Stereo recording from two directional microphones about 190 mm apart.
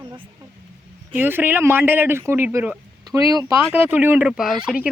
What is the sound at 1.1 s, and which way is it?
A man's voice, 10° right (ahead or behind).